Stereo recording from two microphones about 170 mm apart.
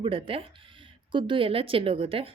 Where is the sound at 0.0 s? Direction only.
30° right (ahead or behind).